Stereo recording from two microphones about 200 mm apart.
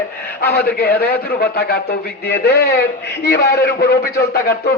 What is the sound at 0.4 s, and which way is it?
A man's voice, 50° left (ahead or behind).